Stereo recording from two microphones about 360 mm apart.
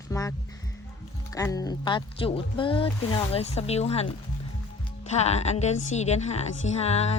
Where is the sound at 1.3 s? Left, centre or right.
Centre.